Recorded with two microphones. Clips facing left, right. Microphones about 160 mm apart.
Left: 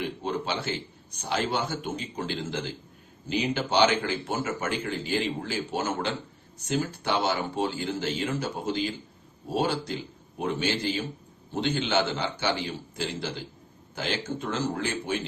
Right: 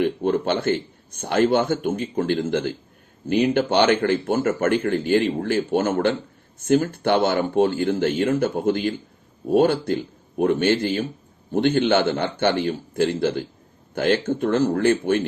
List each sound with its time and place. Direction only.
0.0 s a man's voice: 55° right (ahead or behind)